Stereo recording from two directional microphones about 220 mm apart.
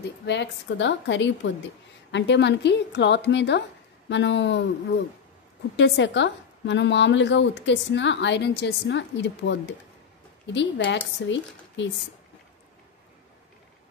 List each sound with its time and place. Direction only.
0.2 s a woman's voice: 50° left (ahead or behind)